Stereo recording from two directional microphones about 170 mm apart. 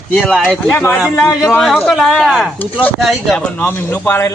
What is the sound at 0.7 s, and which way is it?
Speech, 10° left (ahead or behind).